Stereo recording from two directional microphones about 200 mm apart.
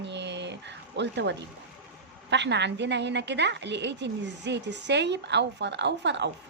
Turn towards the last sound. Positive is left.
turn(degrees=-60)  # may be behind; listen again after turning